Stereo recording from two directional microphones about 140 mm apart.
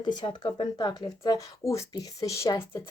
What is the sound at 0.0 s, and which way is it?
Speech, 30° left (ahead or behind).